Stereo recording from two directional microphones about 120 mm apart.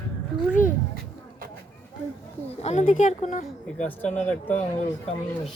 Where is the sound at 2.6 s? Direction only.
75° left (ahead or behind).